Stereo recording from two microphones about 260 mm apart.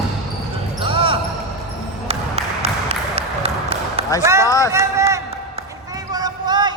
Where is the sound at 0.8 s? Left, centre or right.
Centre.